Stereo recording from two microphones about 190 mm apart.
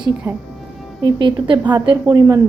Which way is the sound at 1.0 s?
25° right (ahead or behind).